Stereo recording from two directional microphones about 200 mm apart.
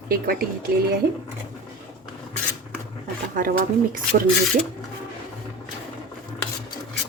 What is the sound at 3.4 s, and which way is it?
Speech, 45° right (ahead or behind).